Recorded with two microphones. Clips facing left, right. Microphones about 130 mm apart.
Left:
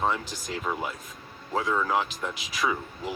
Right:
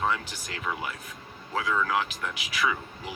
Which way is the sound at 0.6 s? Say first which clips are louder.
Even; 30° left (ahead or behind).